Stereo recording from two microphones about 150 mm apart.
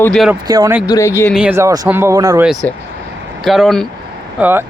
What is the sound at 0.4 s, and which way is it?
Speech, 25° right (ahead or behind).